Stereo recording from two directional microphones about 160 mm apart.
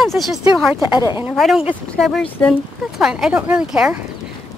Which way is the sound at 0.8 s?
15° right (ahead or behind).